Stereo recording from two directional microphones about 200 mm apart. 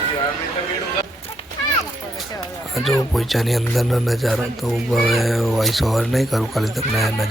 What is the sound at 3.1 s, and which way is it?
Speech, centre (ahead or behind).